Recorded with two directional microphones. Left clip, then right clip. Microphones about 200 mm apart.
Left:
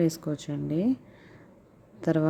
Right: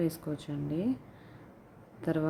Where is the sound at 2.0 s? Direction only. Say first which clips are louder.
Left 6 dB; 30° left (ahead or behind).